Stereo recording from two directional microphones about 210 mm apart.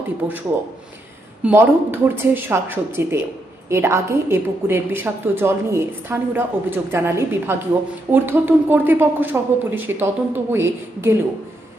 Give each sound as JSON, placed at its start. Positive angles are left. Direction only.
{"t": 0.2, "sound": "a woman's voice", "side_deg": -5}
{"t": 1.5, "sound": "a woman's voice", "side_deg": -10}